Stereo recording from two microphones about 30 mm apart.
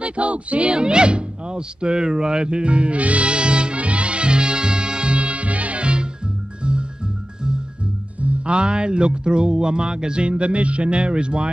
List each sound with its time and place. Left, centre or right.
0.0 s music: right
3.3 s music: right
8.2 s music: right